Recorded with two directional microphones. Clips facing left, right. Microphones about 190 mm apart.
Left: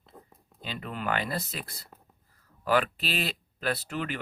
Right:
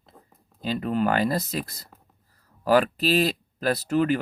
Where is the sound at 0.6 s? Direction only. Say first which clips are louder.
Right 11 dB; 40° right (ahead or behind).